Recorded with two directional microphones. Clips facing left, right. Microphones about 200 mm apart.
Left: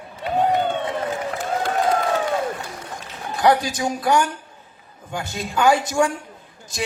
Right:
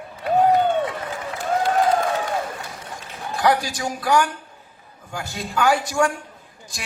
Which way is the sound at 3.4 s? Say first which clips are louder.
Left 2 dB; 20° left (ahead or behind).